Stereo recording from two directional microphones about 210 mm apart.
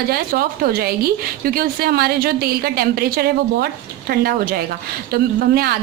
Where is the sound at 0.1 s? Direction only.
45° right (ahead or behind).